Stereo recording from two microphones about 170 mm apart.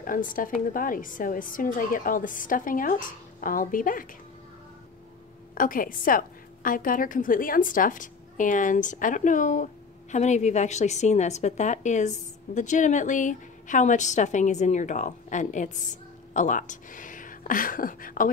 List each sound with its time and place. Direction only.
0.0 s a woman's voice: 55° left (ahead or behind)
5.5 s a woman's voice: 55° left (ahead or behind)